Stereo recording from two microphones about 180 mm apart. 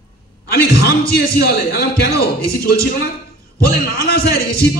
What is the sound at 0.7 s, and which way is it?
A man's voice, 60° left (ahead or behind).